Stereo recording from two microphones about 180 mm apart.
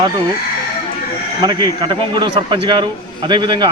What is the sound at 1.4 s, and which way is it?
A man's voice, 25° right (ahead or behind).